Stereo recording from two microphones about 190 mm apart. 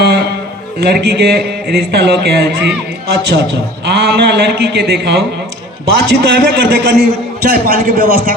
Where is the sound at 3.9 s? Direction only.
60° right (ahead or behind).